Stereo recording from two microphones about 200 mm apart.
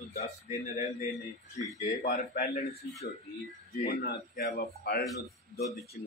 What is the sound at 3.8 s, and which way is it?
Speech, 55° left (ahead or behind).